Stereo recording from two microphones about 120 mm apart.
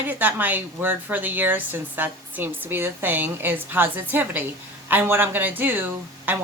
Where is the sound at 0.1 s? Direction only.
15° right (ahead or behind).